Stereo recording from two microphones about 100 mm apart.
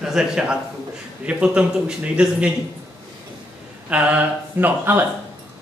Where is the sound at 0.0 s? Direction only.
5° right (ahead or behind).